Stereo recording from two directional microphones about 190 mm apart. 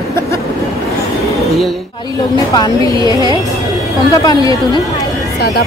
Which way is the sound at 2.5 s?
20° left (ahead or behind).